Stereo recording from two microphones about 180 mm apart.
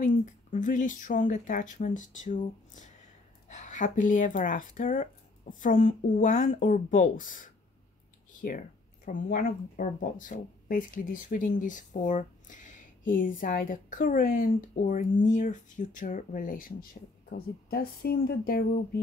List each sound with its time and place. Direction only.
0.0 s speech: 40° left (ahead or behind)